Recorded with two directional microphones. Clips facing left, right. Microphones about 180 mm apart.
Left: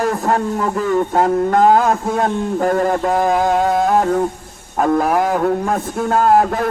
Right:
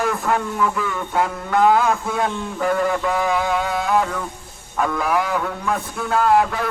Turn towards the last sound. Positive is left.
turn(degrees=45)  # may be behind; listen again after turning